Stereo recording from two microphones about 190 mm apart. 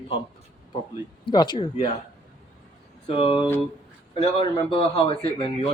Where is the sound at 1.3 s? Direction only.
25° left (ahead or behind).